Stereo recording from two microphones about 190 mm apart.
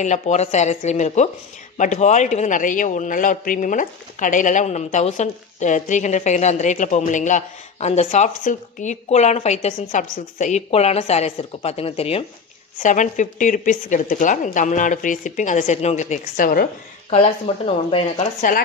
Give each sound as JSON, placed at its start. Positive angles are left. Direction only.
{"t": 0.0, "sound": "a man's voice", "side_deg": 40}
{"t": 12.8, "sound": "a man's voice", "side_deg": 40}
{"t": 17.1, "sound": "a man's voice", "side_deg": 35}